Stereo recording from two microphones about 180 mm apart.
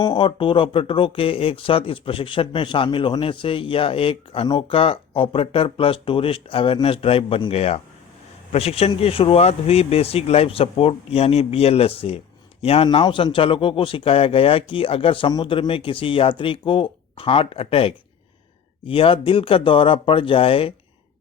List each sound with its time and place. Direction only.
0.0 s speech: 25° left (ahead or behind)